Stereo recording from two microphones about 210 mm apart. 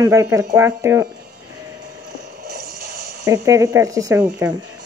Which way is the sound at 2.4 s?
45° right (ahead or behind).